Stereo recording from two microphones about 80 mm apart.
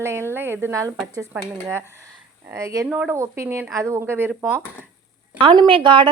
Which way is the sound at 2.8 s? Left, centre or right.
Centre.